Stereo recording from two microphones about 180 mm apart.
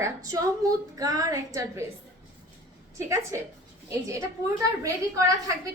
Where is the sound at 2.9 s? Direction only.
15° right (ahead or behind).